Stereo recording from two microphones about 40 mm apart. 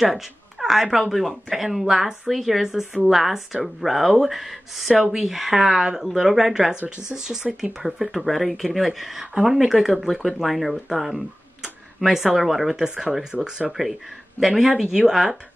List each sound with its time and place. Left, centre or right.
0.0 s speech: centre
12.8 s speech: centre
13.7 s speech: centre